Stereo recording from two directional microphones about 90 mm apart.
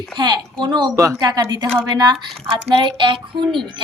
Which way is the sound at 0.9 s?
40° right (ahead or behind).